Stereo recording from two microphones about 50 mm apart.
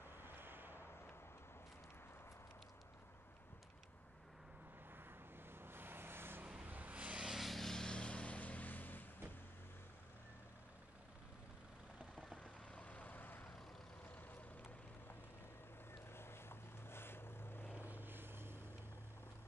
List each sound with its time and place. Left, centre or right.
0.2 s vehicle: right
5.5 s vehicle: right
6.6 s vehicle: right
7.2 s vehicle: centre; by 9.0 s left
12.7 s vehicle: left
16.1 s vehicle: left
17.8 s vehicle: right